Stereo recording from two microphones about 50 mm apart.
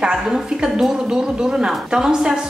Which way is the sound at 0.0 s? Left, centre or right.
Centre.